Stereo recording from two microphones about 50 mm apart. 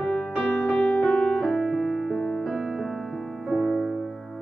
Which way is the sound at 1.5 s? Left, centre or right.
Centre.